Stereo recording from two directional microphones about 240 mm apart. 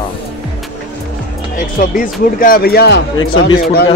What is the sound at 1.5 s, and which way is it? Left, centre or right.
Speech, left.